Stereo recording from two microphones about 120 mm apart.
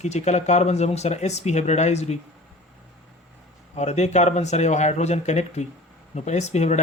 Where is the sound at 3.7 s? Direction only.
70° left (ahead or behind).